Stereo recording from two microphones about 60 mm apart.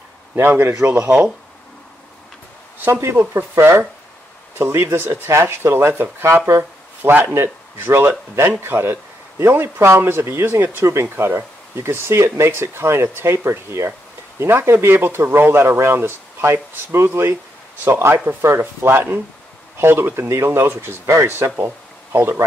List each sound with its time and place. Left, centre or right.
0.4 s speech: right
3.0 s speech: right
10.6 s speech: right